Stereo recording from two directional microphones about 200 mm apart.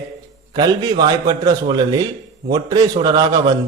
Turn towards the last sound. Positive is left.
turn(degrees=-20)  # may be behind; listen again after turning